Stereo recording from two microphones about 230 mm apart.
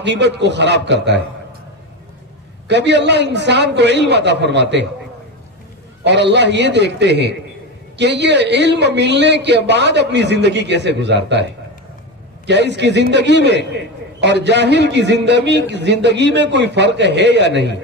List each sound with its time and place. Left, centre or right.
0.0 s a man's voice: right
2.7 s a man's voice: right
6.0 s a man's voice: right
12.4 s a man's voice: right